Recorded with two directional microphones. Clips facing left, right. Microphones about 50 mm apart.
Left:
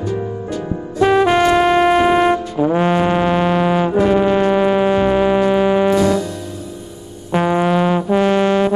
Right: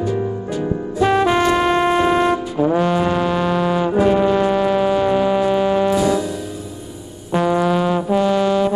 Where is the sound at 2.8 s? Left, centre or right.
Left.